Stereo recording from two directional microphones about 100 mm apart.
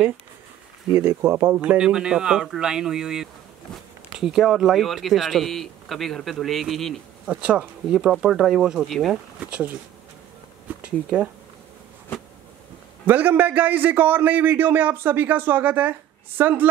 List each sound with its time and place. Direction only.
0.9 s speech: 25° right (ahead or behind)
1.6 s a man's voice: 10° right (ahead or behind)
7.2 s a man's voice: 10° right (ahead or behind)
13.0 s a man's voice: 20° right (ahead or behind)